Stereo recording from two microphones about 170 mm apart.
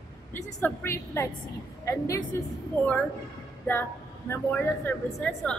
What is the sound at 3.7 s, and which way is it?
A woman's voice, 15° left (ahead or behind).